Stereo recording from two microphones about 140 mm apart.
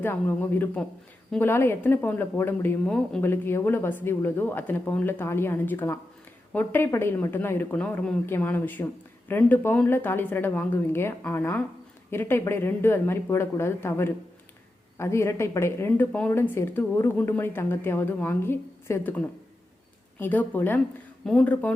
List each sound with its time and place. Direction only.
0.0 s speech: 15° left (ahead or behind)